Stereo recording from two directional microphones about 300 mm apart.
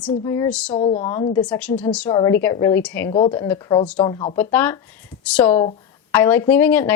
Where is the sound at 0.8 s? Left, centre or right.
Left.